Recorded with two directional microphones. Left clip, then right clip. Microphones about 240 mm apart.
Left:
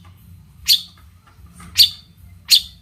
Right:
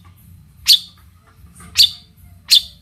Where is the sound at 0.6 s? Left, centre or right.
Centre.